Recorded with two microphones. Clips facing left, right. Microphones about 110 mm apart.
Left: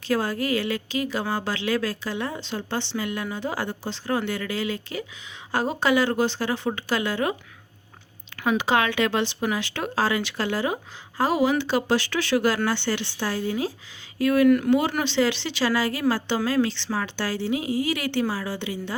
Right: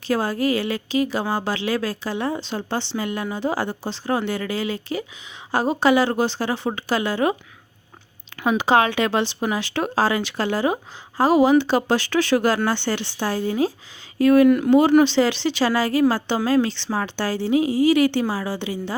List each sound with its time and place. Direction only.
0.1 s speech: 30° right (ahead or behind)
5.9 s speech: 30° right (ahead or behind)
8.5 s speech: 35° right (ahead or behind)
14.4 s speech: 15° right (ahead or behind)
14.7 s speech: 35° right (ahead or behind)
16.4 s speech: 25° right (ahead or behind)
16.9 s speech: 40° right (ahead or behind)
17.5 s speech: 30° right (ahead or behind)